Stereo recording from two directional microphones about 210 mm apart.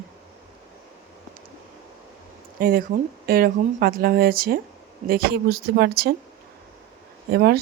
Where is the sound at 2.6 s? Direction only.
45° right (ahead or behind).